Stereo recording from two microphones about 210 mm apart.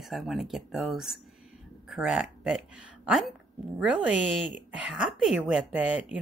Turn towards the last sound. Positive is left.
turn(degrees=-5)  # may be behind; listen again after turning